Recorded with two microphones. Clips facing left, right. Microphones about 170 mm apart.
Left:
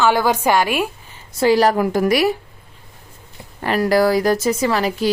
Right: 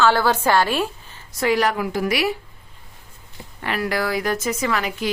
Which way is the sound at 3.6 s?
40° left (ahead or behind).